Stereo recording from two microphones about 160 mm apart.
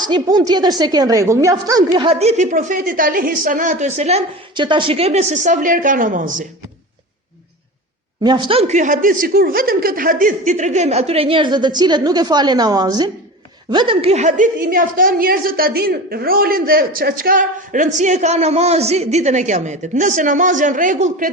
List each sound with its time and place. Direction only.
0.0 s a woman's voice: 25° right (ahead or behind)
2.0 s a woman's voice: 40° right (ahead or behind)
4.5 s a woman's voice: 30° right (ahead or behind); by 6.4 s 55° right (ahead or behind)
8.2 s a woman's voice: 30° right (ahead or behind); by 21.2 s 55° right (ahead or behind)